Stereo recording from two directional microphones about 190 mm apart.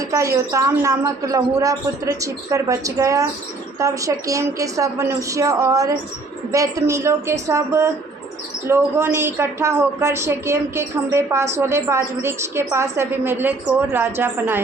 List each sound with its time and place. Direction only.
0.0 s a woman's voice: 15° right (ahead or behind)